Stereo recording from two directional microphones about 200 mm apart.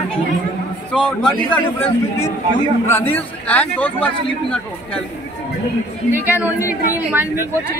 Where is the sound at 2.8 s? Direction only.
10° left (ahead or behind).